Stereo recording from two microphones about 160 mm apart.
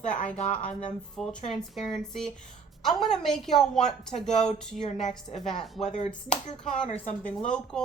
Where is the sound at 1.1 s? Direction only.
5° left (ahead or behind).